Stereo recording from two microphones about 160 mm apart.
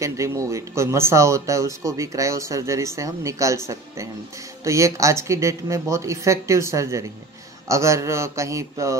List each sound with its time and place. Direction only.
0.0 s speech: 20° right (ahead or behind)